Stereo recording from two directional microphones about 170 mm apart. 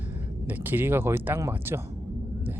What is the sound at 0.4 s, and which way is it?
Speech, 10° right (ahead or behind).